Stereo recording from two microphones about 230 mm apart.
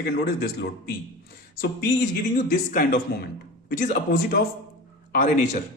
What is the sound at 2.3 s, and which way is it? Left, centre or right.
A man's voice, left.